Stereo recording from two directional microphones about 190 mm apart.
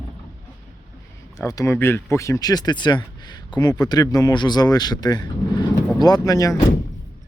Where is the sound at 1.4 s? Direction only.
15° left (ahead or behind).